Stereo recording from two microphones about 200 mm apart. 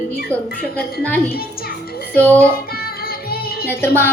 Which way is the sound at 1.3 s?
50° left (ahead or behind).